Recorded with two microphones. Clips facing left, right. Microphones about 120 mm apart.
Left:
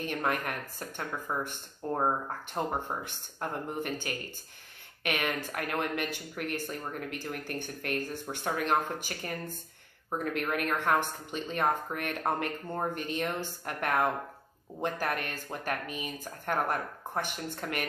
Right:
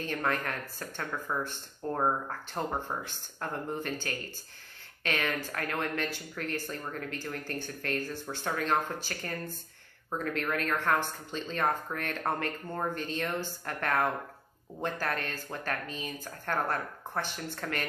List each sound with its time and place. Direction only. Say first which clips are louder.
0.0 s speech: even; 15° left (ahead or behind)